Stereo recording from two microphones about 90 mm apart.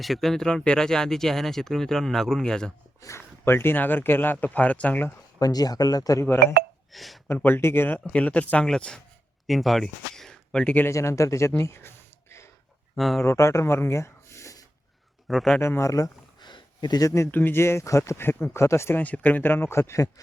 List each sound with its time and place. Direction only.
0.0 s speech: centre (ahead or behind)
3.0 s speech: 30° left (ahead or behind)
5.4 s speech: 45° left (ahead or behind)
6.9 s speech: centre (ahead or behind)
7.3 s speech: 25° left (ahead or behind)
10.8 s speech: 30° left (ahead or behind)
13.0 s speech: centre (ahead or behind)
13.2 s speech: 35° left (ahead or behind)
15.3 s speech: centre (ahead or behind)
15.6 s speech: 30° left (ahead or behind)
16.4 s a sound: 60° left (ahead or behind)
17.3 s speech: 25° left (ahead or behind)
19.0 s speech: 20° left (ahead or behind); by 20.2 s 35° left (ahead or behind)